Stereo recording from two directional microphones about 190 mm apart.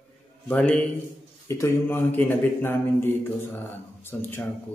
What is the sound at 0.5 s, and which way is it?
Speech, 5° left (ahead or behind).